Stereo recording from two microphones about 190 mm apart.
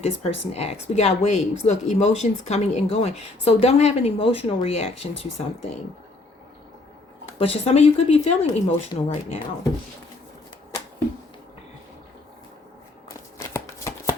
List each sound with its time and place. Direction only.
0.0 s speech: 30° left (ahead or behind)
7.3 s speech: 30° left (ahead or behind)
13.1 s a sound: 15° left (ahead or behind)